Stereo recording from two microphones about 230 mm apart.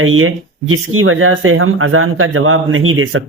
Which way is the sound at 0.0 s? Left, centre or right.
Right.